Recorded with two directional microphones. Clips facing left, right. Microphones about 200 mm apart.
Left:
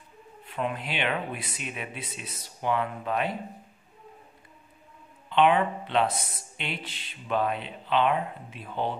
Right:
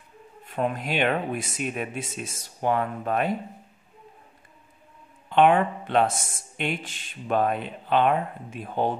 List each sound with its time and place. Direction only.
0.5 s speech: 45° right (ahead or behind)
5.3 s speech: 45° right (ahead or behind)